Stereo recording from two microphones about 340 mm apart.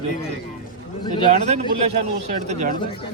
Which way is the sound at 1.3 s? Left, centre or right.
Centre.